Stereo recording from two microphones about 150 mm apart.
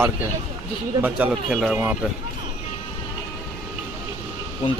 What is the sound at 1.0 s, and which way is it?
Speech, 10° right (ahead or behind).